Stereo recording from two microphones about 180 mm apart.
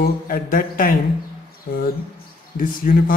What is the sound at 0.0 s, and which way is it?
Speech, 50° left (ahead or behind).